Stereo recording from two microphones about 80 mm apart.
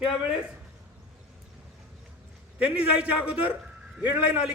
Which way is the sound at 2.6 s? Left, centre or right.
Centre.